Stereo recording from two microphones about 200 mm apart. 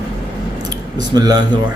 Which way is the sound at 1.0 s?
20° right (ahead or behind).